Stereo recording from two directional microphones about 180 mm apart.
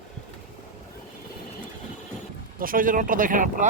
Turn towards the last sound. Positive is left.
turn(degrees=-45)  # may be behind; listen again after turning